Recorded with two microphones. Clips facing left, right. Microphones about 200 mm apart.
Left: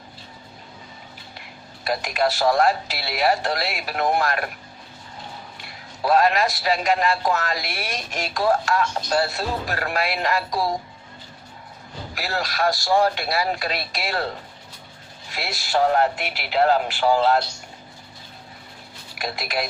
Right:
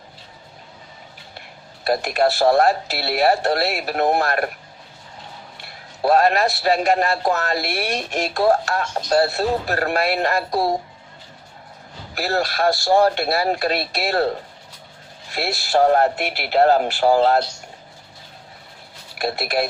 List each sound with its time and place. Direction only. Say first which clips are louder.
1.8 s speech: right 4 dB; 40° right (ahead or behind)
6.0 s speech: right 2 dB; 40° right (ahead or behind)
12.1 s speech: right 5 dB; 40° right (ahead or behind)
15.4 s speech: right 4 dB; 40° right (ahead or behind)
19.2 s speech: right 5 dB; 40° right (ahead or behind)